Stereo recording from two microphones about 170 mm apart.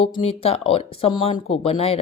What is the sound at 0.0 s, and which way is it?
A woman's voice, 35° left (ahead or behind).